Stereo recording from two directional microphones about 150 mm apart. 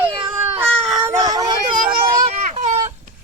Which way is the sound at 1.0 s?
25° right (ahead or behind).